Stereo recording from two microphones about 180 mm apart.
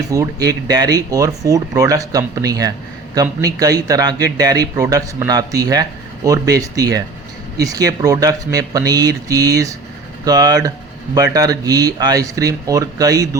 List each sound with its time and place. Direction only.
0.1 s speech: 20° right (ahead or behind)